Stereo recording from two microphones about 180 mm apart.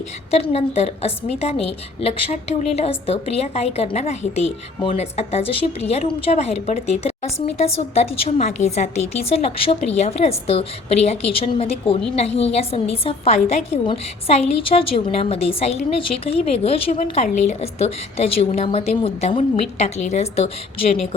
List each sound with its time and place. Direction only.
0.3 s a woman's voice: 35° left (ahead or behind)